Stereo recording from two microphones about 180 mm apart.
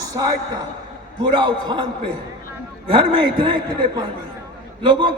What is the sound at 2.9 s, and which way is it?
Speech, 30° right (ahead or behind).